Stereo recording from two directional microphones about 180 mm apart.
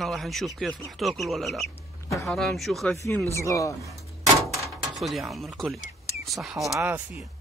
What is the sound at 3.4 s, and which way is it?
Speech, 15° left (ahead or behind).